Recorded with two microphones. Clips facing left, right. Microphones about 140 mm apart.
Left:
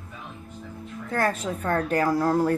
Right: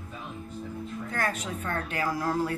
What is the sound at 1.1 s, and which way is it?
A woman's voice, 35° left (ahead or behind).